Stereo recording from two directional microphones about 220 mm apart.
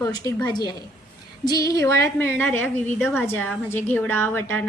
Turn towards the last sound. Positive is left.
turn(degrees=10)  # may be behind; listen again after turning